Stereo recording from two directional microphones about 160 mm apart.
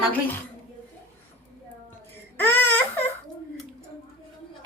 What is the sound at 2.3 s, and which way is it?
Baby cry, 15° left (ahead or behind).